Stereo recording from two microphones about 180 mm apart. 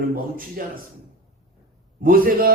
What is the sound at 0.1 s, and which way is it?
Speech, 50° right (ahead or behind).